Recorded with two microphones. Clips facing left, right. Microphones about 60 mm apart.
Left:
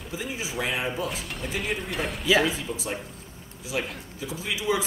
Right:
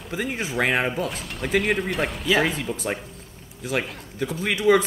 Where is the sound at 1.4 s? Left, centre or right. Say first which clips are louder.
Right 9 dB; right.